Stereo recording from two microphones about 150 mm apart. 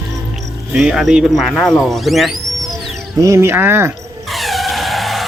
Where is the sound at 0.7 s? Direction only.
Centre (ahead or behind).